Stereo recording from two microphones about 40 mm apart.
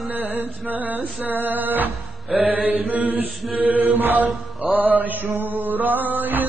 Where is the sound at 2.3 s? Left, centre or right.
Right.